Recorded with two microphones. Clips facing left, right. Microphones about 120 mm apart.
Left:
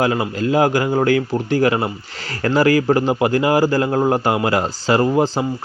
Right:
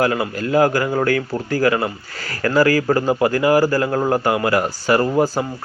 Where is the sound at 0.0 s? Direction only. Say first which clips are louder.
Left 1 dB; 25° left (ahead or behind).